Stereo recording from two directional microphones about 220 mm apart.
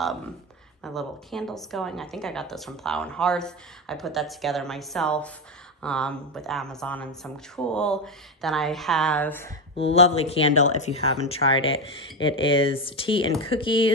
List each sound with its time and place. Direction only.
0.8 s speech: centre (ahead or behind)
9.8 s speech: 30° left (ahead or behind)